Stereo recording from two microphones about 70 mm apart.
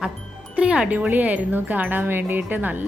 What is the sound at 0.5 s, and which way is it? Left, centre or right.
Speech, centre.